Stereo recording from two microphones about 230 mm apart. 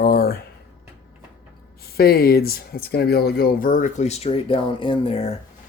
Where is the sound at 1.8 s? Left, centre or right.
Left.